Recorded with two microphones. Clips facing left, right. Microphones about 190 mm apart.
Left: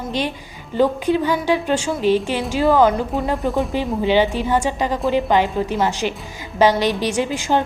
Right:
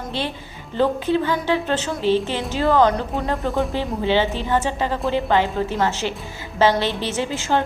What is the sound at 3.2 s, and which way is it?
A woman's voice, 15° left (ahead or behind).